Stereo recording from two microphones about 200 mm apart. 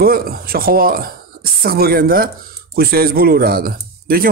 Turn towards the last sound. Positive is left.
turn(degrees=-45)  # may be behind; listen again after turning